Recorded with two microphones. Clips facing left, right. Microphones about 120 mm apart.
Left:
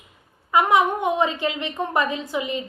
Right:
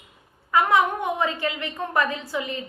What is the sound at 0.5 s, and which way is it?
A woman's voice, 20° left (ahead or behind).